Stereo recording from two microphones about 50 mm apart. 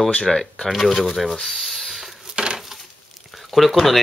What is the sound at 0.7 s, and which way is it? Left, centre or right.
Speech, centre.